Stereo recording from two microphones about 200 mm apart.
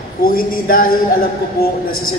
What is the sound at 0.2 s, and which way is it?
Speech, 45° left (ahead or behind).